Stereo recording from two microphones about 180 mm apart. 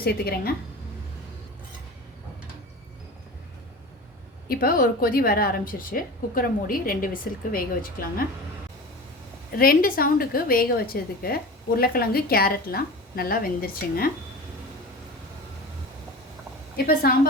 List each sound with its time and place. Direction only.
0.0 s a woman's voice: 60° left (ahead or behind)
4.4 s a woman's voice: 55° left (ahead or behind)
9.6 s a woman's voice: 55° left (ahead or behind)
16.7 s a woman's voice: 55° left (ahead or behind)